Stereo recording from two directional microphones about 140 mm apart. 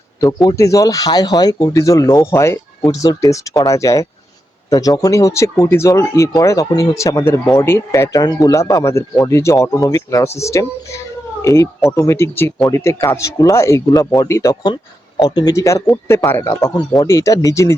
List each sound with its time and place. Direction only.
0.4 s speech: 25° left (ahead or behind)